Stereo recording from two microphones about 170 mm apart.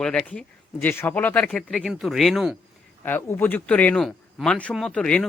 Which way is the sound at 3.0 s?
10° left (ahead or behind).